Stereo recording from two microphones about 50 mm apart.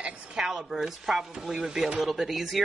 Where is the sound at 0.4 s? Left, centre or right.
Centre.